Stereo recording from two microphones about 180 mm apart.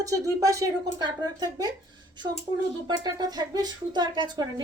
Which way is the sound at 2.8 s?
25° right (ahead or behind).